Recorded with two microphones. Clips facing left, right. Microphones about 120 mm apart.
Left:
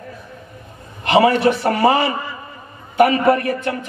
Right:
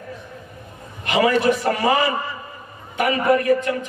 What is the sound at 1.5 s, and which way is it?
A man's voice, 30° left (ahead or behind).